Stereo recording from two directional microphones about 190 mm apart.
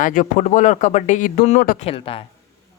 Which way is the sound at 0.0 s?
40° left (ahead or behind).